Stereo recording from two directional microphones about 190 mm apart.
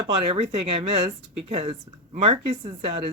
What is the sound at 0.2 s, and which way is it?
Speech, 35° right (ahead or behind).